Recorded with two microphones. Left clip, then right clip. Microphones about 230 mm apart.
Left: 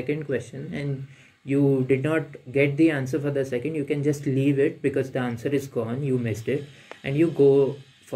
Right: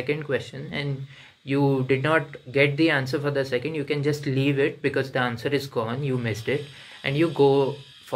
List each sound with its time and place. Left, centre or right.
0.0 s speech: centre
1.5 s speech: centre